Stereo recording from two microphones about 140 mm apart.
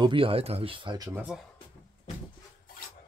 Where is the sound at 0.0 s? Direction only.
40° right (ahead or behind).